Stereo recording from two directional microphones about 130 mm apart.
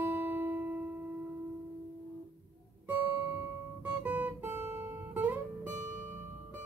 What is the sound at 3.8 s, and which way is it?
Guitar, 15° right (ahead or behind).